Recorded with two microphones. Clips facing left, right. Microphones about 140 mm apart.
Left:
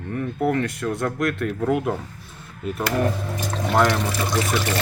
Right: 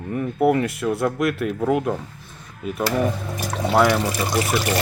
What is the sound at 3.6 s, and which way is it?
Speech, 5° right (ahead or behind).